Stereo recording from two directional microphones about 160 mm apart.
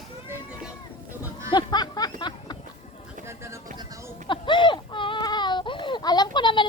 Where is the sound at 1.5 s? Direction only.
25° left (ahead or behind).